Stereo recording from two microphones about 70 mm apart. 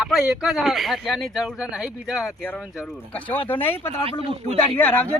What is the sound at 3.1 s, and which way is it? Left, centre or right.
Speech, left.